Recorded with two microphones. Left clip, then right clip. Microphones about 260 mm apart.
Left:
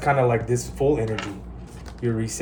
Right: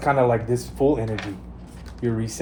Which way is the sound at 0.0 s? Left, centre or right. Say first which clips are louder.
Right 1 dB; right.